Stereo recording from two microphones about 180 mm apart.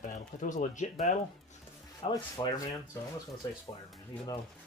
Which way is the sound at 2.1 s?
20° left (ahead or behind).